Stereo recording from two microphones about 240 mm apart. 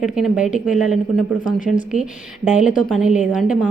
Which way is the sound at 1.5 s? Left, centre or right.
Left.